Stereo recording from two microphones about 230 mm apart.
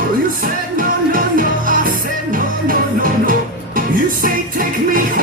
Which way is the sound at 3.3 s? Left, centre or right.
Right.